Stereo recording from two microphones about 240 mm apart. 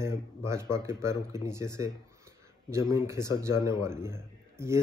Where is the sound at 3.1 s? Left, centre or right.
Centre.